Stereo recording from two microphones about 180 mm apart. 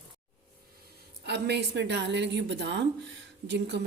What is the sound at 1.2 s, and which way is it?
Speech, 70° right (ahead or behind).